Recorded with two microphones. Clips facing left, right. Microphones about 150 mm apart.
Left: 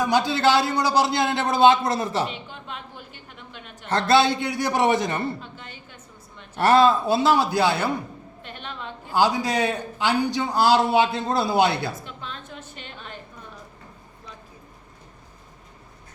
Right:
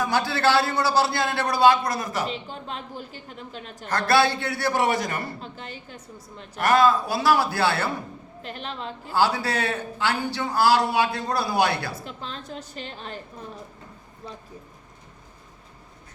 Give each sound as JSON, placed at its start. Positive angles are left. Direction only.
{"t": 0.0, "sound": "a man's voice", "side_deg": 20}
{"t": 2.5, "sound": "a woman's voice", "side_deg": -35}
{"t": 3.8, "sound": "a man's voice", "side_deg": 25}
{"t": 5.4, "sound": "a woman's voice", "side_deg": -35}
{"t": 6.6, "sound": "a man's voice", "side_deg": 30}
{"t": 8.4, "sound": "a woman's voice", "side_deg": -35}
{"t": 9.1, "sound": "a man's voice", "side_deg": 15}
{"t": 12.0, "sound": "a woman's voice", "side_deg": -35}